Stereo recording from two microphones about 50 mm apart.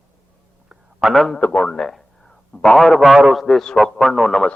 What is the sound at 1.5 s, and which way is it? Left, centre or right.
A man's voice, centre.